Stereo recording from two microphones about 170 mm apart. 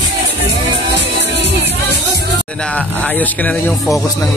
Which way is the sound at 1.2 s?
90° right.